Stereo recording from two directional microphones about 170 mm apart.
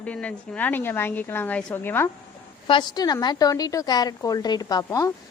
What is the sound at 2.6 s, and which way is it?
A woman's voice, 25° left (ahead or behind).